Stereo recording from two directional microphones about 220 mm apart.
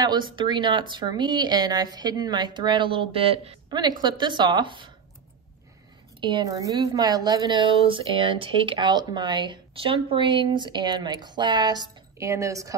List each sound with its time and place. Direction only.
0.0 s a woman's voice: 20° right (ahead or behind)
6.2 s a woman's voice: 20° right (ahead or behind)